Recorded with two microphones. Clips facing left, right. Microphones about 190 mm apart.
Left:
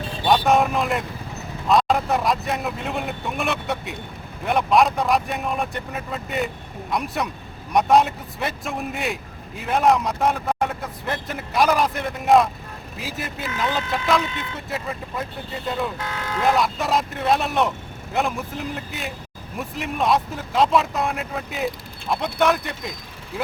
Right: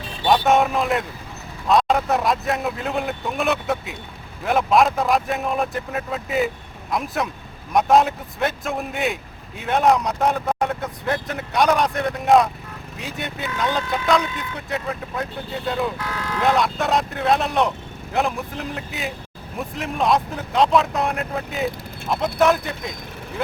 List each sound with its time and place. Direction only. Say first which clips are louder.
0.4 s speech: right 1 dB; centre (ahead or behind)
16.0 s speech: right 1 dB; 25° left (ahead or behind)
16.6 s speech: right 1 dB; centre (ahead or behind)